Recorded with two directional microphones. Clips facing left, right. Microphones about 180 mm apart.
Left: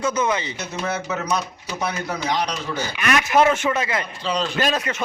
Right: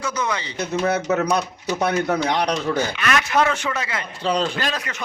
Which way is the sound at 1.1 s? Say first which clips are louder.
Right 4 dB; 65° right (ahead or behind).